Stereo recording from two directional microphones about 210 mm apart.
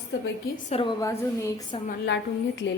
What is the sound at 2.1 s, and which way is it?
Speech, 60° left (ahead or behind).